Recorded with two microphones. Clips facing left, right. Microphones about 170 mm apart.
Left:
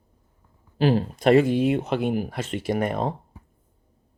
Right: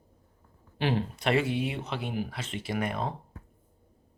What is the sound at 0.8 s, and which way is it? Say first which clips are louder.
Speech: left 8 dB; 40° left (ahead or behind).